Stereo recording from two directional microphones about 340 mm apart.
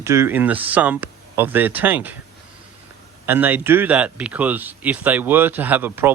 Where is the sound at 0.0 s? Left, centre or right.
Centre.